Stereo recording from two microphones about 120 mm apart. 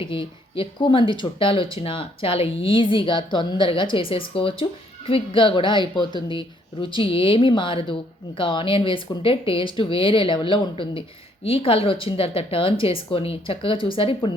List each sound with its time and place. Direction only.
0.0 s speech: 45° left (ahead or behind)